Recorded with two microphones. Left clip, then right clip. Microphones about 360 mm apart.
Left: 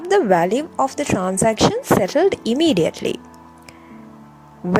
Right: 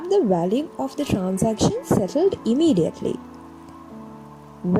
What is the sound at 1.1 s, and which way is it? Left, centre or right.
Speech, left.